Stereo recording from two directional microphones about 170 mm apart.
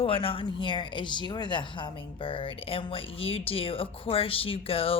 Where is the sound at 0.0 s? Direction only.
35° left (ahead or behind).